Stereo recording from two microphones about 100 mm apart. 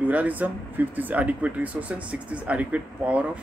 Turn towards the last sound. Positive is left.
turn(degrees=-15)  # may be behind; listen again after turning